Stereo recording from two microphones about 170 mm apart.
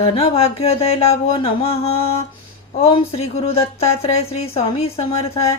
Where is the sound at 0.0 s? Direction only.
35° left (ahead or behind).